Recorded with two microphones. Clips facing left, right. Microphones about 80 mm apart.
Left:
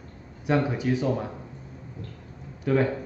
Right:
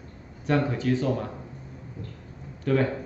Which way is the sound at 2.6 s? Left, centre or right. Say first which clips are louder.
Left 1 dB; centre.